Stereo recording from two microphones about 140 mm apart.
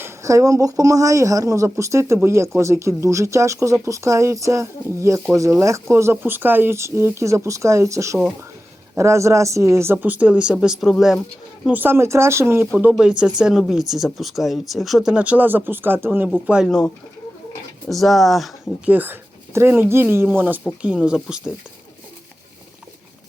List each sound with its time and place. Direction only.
0.0 s a man's voice: 20° right (ahead or behind); by 11.2 s centre (ahead or behind)
11.6 s a man's voice: 10° right (ahead or behind)
16.5 s speech: 5° right (ahead or behind)
17.8 s speech: centre (ahead or behind)
18.9 s a man's voice: 15° right (ahead or behind)